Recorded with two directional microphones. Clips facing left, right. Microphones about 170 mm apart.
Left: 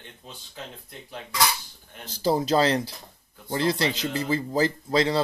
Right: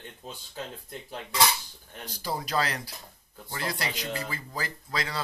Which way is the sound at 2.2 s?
25° left (ahead or behind).